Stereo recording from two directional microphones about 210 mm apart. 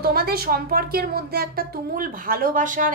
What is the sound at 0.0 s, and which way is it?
A woman's voice, 45° right (ahead or behind).